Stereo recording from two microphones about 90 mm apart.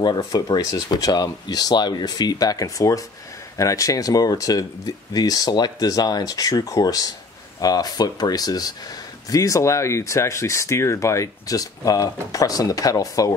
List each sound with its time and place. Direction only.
0.2 s speech: 40° left (ahead or behind)